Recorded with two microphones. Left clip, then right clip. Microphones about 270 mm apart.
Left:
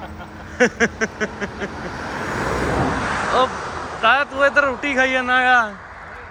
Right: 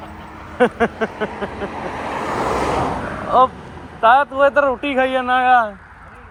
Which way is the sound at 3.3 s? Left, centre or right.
Centre.